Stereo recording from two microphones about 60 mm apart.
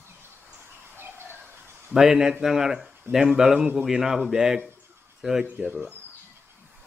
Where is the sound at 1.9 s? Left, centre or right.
Centre.